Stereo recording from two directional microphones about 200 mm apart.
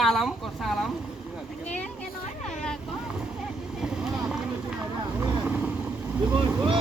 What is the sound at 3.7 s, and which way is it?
Boat, centre (ahead or behind).